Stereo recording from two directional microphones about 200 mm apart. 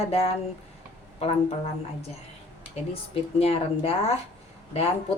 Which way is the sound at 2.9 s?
30° left (ahead or behind).